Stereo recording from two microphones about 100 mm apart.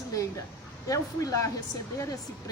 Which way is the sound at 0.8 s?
35° left (ahead or behind).